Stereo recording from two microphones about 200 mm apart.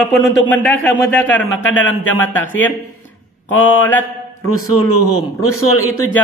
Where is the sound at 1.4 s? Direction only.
80° left.